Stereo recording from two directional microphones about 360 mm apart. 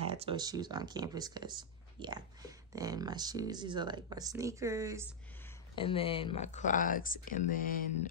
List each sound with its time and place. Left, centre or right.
0.0 s speech: centre
5.8 s speech: centre